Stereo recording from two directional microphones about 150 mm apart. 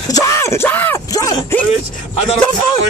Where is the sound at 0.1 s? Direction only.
20° left (ahead or behind).